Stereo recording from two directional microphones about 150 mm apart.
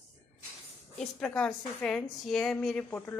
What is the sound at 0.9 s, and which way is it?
A woman's voice, 5° left (ahead or behind).